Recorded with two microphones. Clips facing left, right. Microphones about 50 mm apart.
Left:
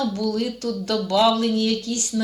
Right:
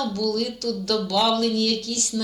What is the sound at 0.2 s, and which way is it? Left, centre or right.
Speech, left.